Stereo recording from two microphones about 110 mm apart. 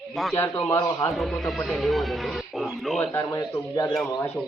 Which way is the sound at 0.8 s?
30° left (ahead or behind).